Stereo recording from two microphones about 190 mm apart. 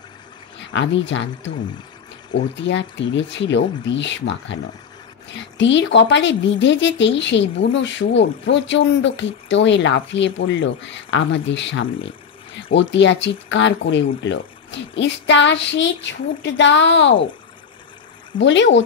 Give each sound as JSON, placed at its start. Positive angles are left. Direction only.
{"t": 0.7, "sound": "speech", "side_deg": 75}
{"t": 5.6, "sound": "speech", "side_deg": 70}
{"t": 12.7, "sound": "speech", "side_deg": 70}
{"t": 18.4, "sound": "speech", "side_deg": 70}